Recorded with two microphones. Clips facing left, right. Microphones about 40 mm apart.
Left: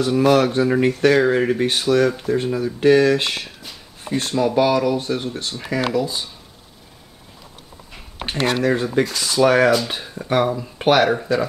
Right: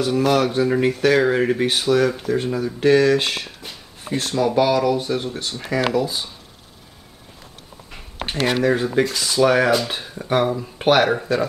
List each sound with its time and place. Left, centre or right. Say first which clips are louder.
0.2 s speech: left 3 dB; centre
8.5 s speech: right 1 dB; centre